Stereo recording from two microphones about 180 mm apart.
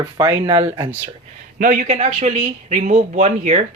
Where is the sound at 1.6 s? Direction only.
40° right (ahead or behind).